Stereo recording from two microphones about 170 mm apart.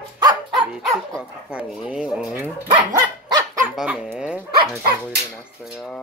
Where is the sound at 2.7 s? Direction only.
25° right (ahead or behind).